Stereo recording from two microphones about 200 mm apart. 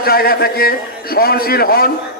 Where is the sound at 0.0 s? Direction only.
50° left (ahead or behind).